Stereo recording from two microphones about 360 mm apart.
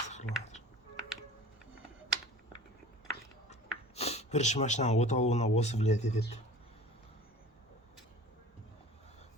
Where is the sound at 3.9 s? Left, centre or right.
Centre.